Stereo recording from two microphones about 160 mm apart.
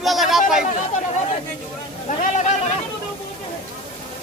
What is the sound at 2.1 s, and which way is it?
Speech, 50° left (ahead or behind).